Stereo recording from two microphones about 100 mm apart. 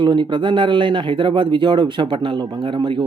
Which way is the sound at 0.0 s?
50° right (ahead or behind).